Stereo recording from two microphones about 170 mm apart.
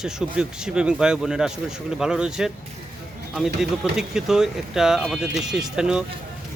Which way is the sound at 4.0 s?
5° right (ahead or behind).